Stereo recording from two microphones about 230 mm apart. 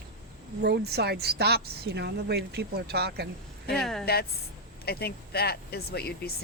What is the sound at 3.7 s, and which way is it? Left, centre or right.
Speech, centre.